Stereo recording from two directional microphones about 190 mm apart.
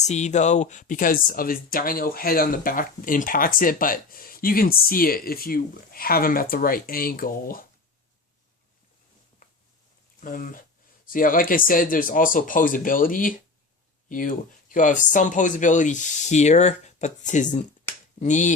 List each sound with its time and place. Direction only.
0.0 s speech: 35° left (ahead or behind)
10.2 s speech: 45° left (ahead or behind)